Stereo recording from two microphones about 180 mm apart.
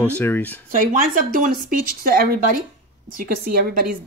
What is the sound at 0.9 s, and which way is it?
Speech, 50° right (ahead or behind).